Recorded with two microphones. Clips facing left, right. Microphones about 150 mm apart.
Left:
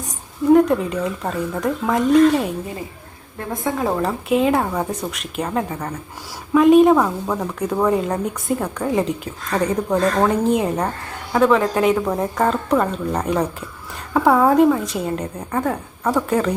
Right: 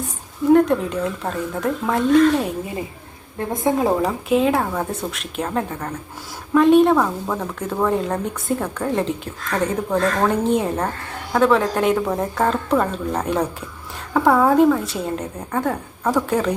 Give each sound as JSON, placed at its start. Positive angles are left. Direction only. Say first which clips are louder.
{"t": 0.5, "sound": "a woman's voice", "louder": "left 1 dB", "side_deg": 5}
{"t": 3.6, "sound": "speech", "louder": "right 3 dB", "side_deg": -20}
{"t": 4.0, "sound": "a woman's voice", "louder": "even", "side_deg": 0}
{"t": 14.1, "sound": "a woman's voice", "louder": "left 1 dB", "side_deg": 10}